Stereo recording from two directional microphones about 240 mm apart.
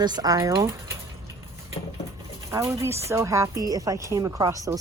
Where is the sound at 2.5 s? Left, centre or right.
Centre.